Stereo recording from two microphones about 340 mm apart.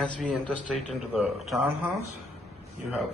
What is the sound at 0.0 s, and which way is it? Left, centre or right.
A man's voice, centre.